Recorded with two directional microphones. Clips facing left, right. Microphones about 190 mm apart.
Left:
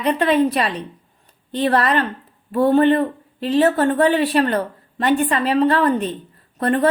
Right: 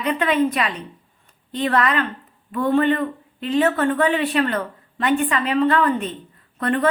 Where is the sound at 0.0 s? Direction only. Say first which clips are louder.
Left 3 dB; 35° left (ahead or behind).